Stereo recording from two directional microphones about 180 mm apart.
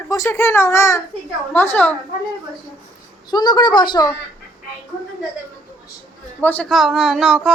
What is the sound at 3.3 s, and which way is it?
Speech, 25° left (ahead or behind).